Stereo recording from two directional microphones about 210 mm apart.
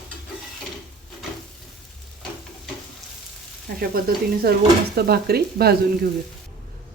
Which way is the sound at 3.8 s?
45° right (ahead or behind).